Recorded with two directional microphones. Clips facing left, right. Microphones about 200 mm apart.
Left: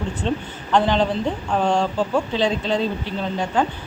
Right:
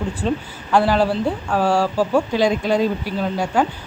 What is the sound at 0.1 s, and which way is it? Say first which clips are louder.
Speech: right 2 dB; 10° right (ahead or behind).